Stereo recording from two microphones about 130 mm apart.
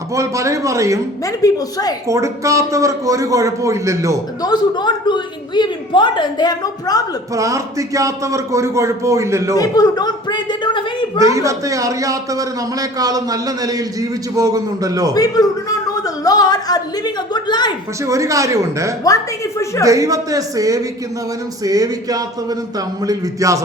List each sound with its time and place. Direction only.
0.1 s a man's voice: 25° right (ahead or behind)
1.2 s a woman's voice: 25° left (ahead or behind)
2.0 s a man's voice: 25° right (ahead or behind)
4.4 s a man's voice: 35° left (ahead or behind)
7.3 s a man's voice: 25° right (ahead or behind)
9.6 s a man's voice: 30° left (ahead or behind)
11.2 s a man's voice: 25° right (ahead or behind)
15.1 s a woman's voice: 30° left (ahead or behind)
18.0 s a man's voice: 25° right (ahead or behind)
19.0 s a woman's voice: 25° left (ahead or behind)
19.8 s a man's voice: 25° right (ahead or behind)